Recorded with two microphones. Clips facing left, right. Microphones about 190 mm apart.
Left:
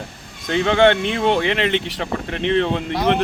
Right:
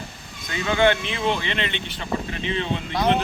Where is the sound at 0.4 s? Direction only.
70° left (ahead or behind).